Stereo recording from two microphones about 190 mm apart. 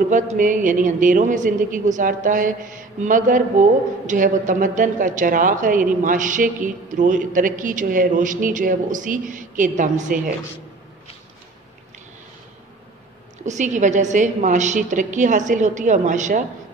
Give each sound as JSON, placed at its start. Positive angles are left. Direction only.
{"t": 0.1, "sound": "speech", "side_deg": -40}
{"t": 13.4, "sound": "a woman's voice", "side_deg": -40}